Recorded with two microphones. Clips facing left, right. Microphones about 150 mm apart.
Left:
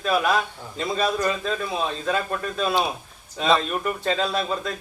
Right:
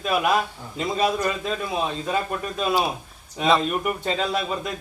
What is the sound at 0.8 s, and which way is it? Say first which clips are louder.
Speech: right 1 dB; 15° right (ahead or behind).